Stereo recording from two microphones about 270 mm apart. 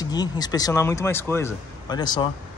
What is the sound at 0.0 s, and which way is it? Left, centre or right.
Speech, centre.